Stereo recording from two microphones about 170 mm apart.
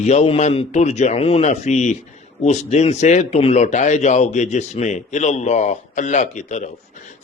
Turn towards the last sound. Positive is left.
turn(degrees=45)  # may be behind; listen again after turning